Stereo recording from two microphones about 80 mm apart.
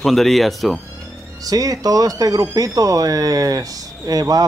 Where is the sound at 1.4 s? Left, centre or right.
Right.